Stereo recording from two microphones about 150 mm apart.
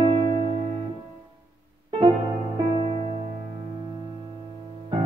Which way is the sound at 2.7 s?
35° right (ahead or behind).